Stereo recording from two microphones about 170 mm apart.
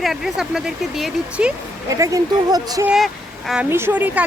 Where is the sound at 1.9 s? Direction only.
20° right (ahead or behind).